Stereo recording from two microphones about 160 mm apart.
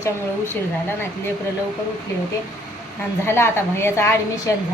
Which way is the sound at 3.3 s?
15° left (ahead or behind).